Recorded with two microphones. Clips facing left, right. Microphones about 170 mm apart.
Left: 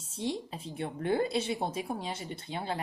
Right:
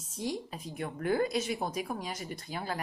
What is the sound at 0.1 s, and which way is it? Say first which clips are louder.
A woman's voice: left 1 dB; 25° left (ahead or behind).